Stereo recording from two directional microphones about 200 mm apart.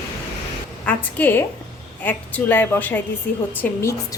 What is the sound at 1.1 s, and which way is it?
A woman's voice, 10° left (ahead or behind).